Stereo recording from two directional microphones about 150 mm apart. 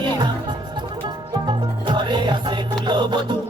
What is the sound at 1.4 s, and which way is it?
Music, 30° right (ahead or behind).